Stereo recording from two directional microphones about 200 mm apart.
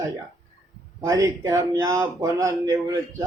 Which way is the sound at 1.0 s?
15° right (ahead or behind).